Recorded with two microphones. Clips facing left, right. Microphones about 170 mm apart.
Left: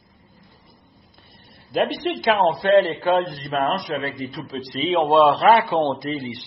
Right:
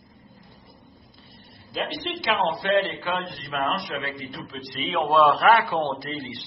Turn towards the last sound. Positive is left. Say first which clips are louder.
# left 6 dB
turn(degrees=15)  # may be behind; listen again after turning